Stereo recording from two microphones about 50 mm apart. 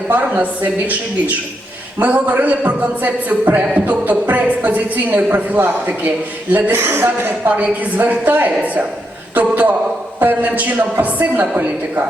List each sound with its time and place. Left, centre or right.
0.1 s a woman's voice: right
2.0 s a woman's voice: right
6.7 s a man's voice: right
7.4 s a woman's voice: right
9.3 s a sound: right
10.2 s a woman's voice: right